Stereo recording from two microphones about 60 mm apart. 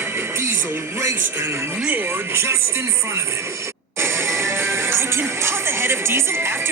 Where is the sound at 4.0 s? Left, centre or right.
Right.